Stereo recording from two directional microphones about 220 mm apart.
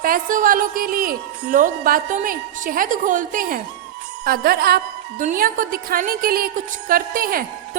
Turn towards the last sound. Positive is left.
turn(degrees=-40)  # may be behind; listen again after turning